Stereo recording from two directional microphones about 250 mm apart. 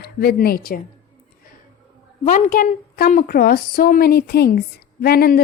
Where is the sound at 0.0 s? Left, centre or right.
Left.